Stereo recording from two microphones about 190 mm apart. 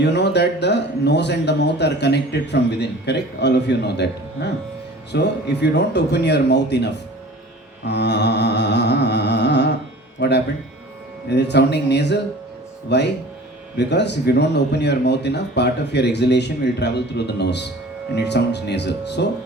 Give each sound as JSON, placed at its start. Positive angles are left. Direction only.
{"t": 0.0, "sound": "a man's voice", "side_deg": 65}
{"t": 7.9, "sound": "humming", "side_deg": 65}
{"t": 10.2, "sound": "a man's voice", "side_deg": 60}